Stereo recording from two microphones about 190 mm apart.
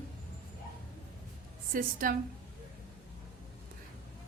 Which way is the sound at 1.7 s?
50° right (ahead or behind).